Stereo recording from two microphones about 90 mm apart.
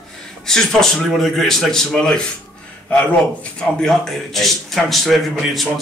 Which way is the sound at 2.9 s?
15° left (ahead or behind).